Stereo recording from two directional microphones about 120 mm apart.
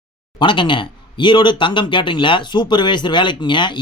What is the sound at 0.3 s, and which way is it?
Speech, 40° left (ahead or behind).